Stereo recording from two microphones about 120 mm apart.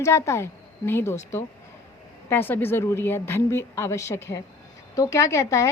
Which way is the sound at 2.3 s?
15° left (ahead or behind).